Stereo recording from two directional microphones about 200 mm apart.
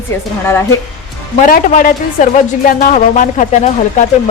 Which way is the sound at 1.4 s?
40° left (ahead or behind).